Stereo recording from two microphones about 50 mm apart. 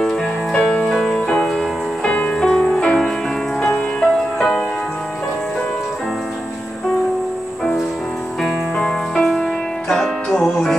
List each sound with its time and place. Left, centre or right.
0.0 s music: centre
0.6 s music: left
0.8 s music: centre
2.0 s music: left
2.3 s music: centre
2.6 s music: centre
9.1 s music: centre